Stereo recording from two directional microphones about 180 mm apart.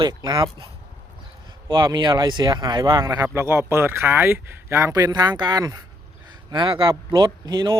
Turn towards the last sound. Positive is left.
turn(degrees=-25)  # may be behind; listen again after turning